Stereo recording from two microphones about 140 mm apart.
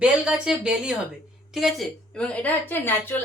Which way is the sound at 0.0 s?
5° right (ahead or behind).